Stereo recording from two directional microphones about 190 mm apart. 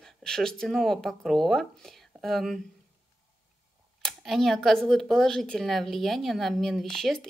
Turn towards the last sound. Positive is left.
turn(degrees=0)  # may be behind; listen again after turning